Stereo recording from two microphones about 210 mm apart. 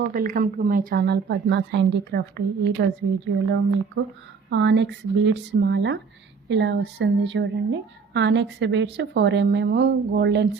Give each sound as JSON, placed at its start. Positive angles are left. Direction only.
{"t": 0.1, "sound": "a woman's voice", "side_deg": -40}